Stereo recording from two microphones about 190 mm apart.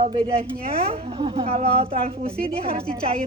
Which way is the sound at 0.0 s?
25° right (ahead or behind).